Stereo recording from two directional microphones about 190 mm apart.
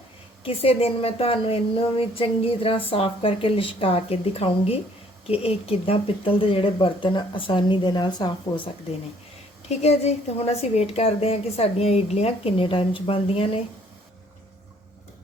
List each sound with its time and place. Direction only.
0.4 s a woman's voice: 30° left (ahead or behind)